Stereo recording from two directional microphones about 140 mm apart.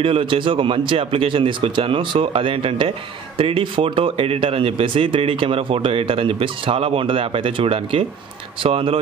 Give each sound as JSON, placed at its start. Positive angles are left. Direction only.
{"t": 0.0, "sound": "speech", "side_deg": -40}